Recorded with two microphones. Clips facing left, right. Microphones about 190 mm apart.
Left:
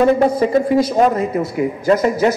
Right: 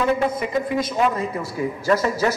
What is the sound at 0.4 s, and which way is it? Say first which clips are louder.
A man's voice: left 9 dB; 30° left (ahead or behind).